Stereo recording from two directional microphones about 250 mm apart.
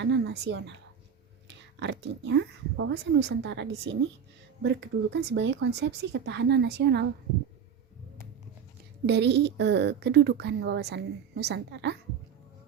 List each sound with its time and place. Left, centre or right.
0.0 s speech: right
9.0 s a woman's voice: right